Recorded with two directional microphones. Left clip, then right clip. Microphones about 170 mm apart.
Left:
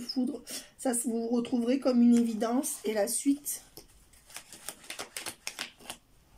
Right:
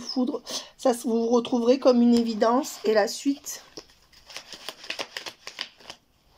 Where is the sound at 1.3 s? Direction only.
45° right (ahead or behind).